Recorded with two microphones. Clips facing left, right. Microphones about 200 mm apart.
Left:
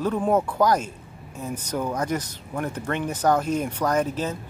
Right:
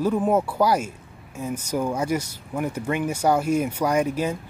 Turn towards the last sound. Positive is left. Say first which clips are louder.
# right 2 dB
turn(degrees=-10)  # may be behind; listen again after turning